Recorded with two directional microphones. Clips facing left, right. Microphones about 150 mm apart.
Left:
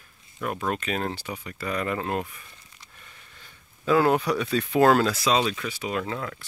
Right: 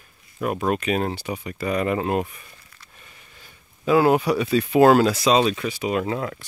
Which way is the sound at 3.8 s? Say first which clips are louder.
Right 3 dB; 10° right (ahead or behind).